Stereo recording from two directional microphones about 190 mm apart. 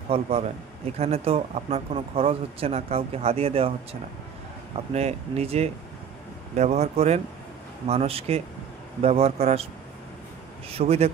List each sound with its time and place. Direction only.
0.1 s speech: 30° right (ahead or behind)
4.9 s speech: 35° right (ahead or behind)
10.7 s speech: 35° right (ahead or behind)